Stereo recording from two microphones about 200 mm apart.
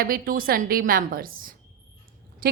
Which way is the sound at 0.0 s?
45° right (ahead or behind).